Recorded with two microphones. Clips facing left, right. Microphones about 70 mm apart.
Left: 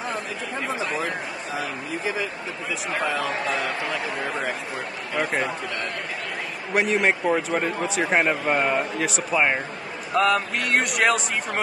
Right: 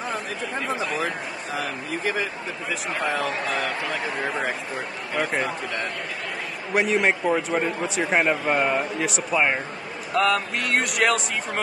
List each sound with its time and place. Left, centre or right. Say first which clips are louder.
1.6 s speech: right 1 dB; right
6.7 s speech: even; centre